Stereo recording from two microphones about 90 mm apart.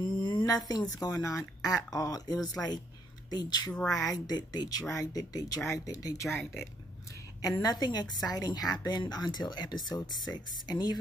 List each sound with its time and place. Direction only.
0.0 s a sound: 60° left (ahead or behind)
0.7 s a woman's voice: 50° left (ahead or behind)
3.7 s speech: 10° left (ahead or behind)
4.1 s a woman's voice: 45° left (ahead or behind)
7.4 s a woman's voice: 45° left (ahead or behind)